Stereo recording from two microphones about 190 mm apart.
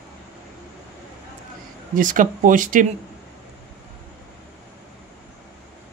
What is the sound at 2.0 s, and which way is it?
Speech, 45° right (ahead or behind).